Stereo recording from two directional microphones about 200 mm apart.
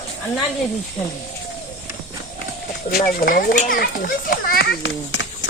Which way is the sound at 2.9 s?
45° left (ahead or behind).